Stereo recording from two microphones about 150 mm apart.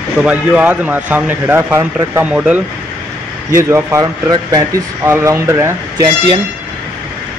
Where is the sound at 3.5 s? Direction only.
20° right (ahead or behind).